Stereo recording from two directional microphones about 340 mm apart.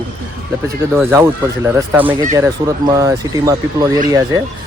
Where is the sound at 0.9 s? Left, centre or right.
Centre.